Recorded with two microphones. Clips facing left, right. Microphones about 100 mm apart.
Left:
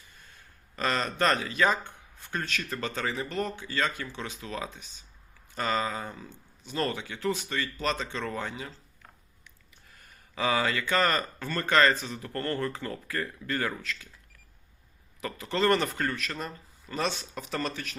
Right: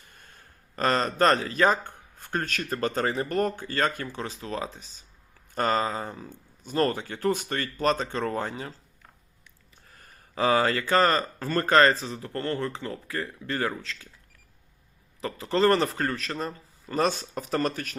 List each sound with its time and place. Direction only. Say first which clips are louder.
0.1 s a man's voice: right 3 dB; 50° right (ahead or behind)
9.9 s speech: right 5 dB; 40° right (ahead or behind)
15.2 s speech: right 4 dB; 35° right (ahead or behind)